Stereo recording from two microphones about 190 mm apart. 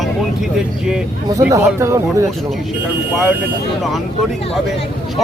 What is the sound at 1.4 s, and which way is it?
Speech, 15° right (ahead or behind).